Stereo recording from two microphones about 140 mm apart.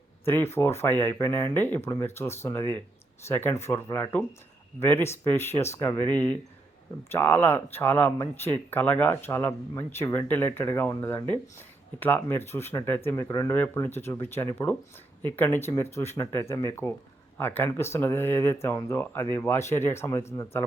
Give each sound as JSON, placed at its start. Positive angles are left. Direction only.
{"t": 0.3, "sound": "speech", "side_deg": 15}